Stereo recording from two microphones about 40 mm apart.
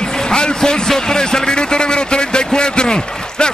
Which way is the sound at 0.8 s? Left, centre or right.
Centre.